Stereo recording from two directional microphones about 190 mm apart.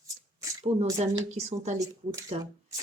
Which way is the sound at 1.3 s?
35° right (ahead or behind).